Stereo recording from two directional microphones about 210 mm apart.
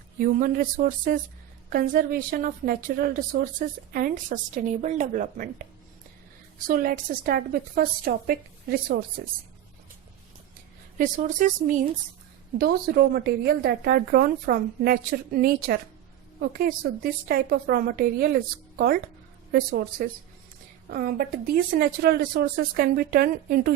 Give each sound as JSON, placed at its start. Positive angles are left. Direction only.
{"t": 0.2, "sound": "a woman's voice", "side_deg": -40}
{"t": 6.7, "sound": "a woman's voice", "side_deg": -40}
{"t": 10.9, "sound": "a woman's voice", "side_deg": -40}
{"t": 19.5, "sound": "a woman's voice", "side_deg": -45}